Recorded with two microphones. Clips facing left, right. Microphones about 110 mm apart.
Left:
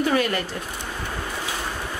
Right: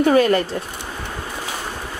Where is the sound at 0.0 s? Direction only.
40° right (ahead or behind).